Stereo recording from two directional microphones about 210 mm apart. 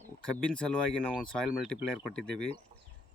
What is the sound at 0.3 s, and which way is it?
Speech, 5° left (ahead or behind).